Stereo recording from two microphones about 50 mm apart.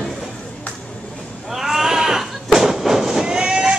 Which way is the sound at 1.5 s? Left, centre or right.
Centre.